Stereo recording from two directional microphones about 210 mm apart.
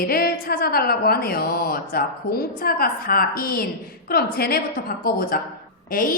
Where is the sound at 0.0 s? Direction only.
45° left (ahead or behind).